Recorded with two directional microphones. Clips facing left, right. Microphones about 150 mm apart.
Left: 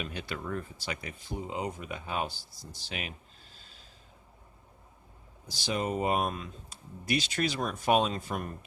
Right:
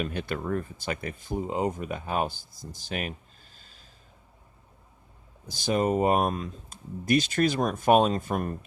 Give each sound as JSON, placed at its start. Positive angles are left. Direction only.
{"t": 0.0, "sound": "speech", "side_deg": -50}
{"t": 5.5, "sound": "speech", "side_deg": -50}